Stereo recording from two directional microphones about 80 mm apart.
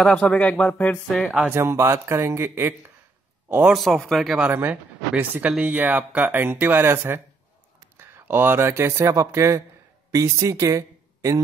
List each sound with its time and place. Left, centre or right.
0.0 s speech: centre
1.1 s speech: centre
1.5 s a man's voice: right
3.4 s a man's voice: centre
3.7 s speech: centre
4.5 s speech: right